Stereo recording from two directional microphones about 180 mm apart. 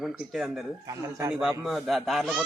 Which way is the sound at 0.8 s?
15° right (ahead or behind).